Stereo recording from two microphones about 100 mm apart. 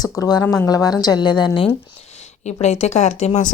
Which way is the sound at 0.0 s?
40° left (ahead or behind).